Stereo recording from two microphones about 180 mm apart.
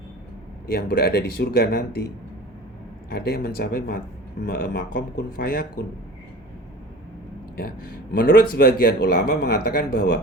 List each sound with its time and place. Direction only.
0.7 s speech: 60° left (ahead or behind)
3.1 s speech: 60° left (ahead or behind)
8.1 s speech: 70° left (ahead or behind)